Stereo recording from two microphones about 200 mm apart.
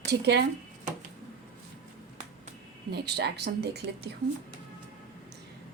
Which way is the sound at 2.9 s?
55° right (ahead or behind).